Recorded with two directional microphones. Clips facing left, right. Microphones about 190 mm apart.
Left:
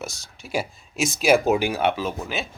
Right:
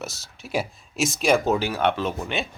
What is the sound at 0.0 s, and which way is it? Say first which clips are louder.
Speech: even; centre (ahead or behind).